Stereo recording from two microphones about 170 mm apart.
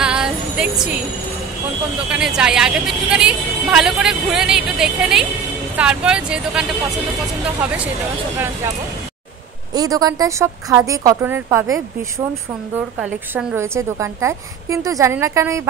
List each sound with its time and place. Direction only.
0.0 s music: 5° right (ahead or behind)
2.0 s a woman's voice: 5° right (ahead or behind)
9.8 s speech: 20° right (ahead or behind)
13.0 s a woman's voice: 5° right (ahead or behind)